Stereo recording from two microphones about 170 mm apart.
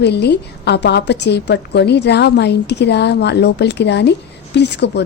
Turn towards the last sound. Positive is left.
turn(degrees=85)